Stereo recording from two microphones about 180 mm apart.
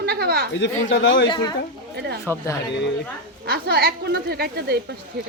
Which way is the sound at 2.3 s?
15° right (ahead or behind).